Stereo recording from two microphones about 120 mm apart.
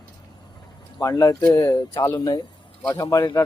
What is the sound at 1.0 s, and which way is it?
Speech, 30° left (ahead or behind).